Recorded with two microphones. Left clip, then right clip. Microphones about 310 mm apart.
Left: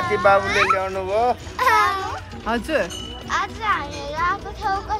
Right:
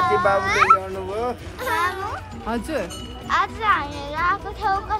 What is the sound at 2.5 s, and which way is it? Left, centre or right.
Speech, centre.